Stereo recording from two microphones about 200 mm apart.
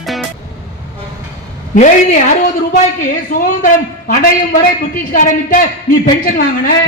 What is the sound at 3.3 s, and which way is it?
A man's voice, 40° left (ahead or behind).